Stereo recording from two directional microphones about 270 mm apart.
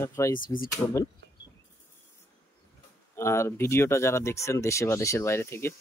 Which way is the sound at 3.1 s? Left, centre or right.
Centre.